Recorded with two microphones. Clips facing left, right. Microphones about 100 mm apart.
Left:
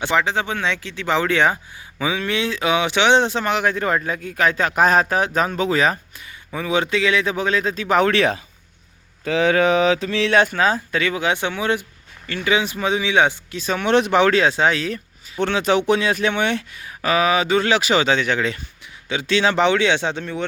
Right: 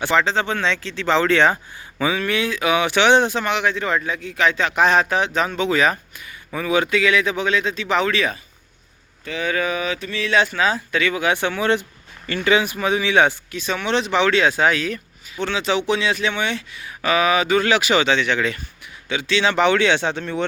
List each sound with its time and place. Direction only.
0.0 s speech: 15° left (ahead or behind); by 6.0 s 35° left (ahead or behind)
6.5 s speech: 20° left (ahead or behind); by 8.4 s 65° left (ahead or behind)
9.2 s speech: 90° left
10.3 s speech: 50° left (ahead or behind); by 11.8 s 15° left (ahead or behind)
11.8 s a sound: centre (ahead or behind)
12.6 s speech: 25° left (ahead or behind)
13.5 s speech: 35° left (ahead or behind)
15.4 s speech: 55° left (ahead or behind)
19.6 s speech: 15° left (ahead or behind)